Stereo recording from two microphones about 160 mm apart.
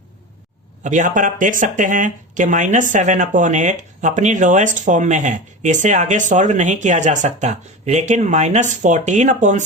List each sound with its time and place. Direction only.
0.9 s speech: 50° right (ahead or behind)